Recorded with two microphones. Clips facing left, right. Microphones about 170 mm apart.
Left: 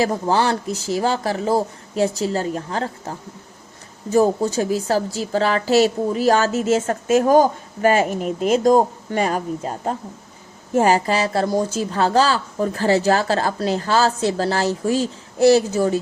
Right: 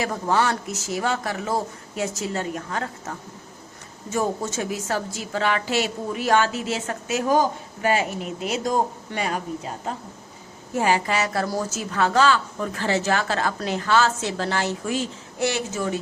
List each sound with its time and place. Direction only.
0.0 s a woman's voice: 30° left (ahead or behind)